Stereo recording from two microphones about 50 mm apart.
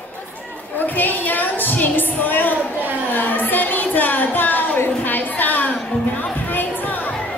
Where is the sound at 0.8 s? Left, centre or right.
Left.